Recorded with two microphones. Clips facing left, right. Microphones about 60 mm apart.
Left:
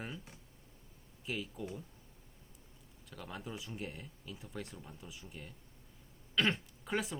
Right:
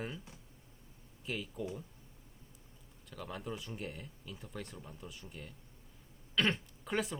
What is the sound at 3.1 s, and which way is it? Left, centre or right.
Speech, centre.